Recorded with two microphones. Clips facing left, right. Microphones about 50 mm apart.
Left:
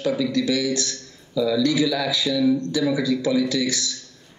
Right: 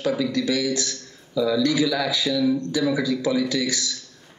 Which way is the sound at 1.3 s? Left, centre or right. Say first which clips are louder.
Even; right.